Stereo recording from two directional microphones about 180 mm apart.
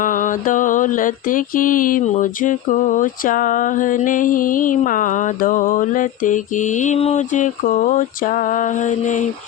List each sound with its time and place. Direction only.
0.0 s mantra: 45° left (ahead or behind)